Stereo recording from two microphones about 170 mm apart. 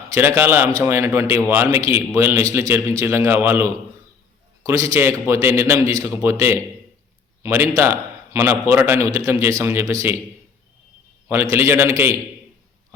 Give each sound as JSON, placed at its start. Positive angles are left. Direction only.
{"t": 0.1, "sound": "a man's voice", "side_deg": -15}
{"t": 11.3, "sound": "a man's voice", "side_deg": -15}